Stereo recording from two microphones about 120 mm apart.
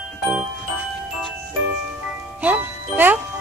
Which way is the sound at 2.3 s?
15° right (ahead or behind).